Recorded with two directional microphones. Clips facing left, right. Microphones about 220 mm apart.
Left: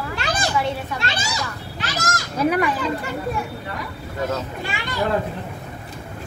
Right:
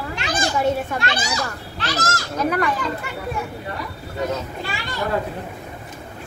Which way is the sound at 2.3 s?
10° left (ahead or behind).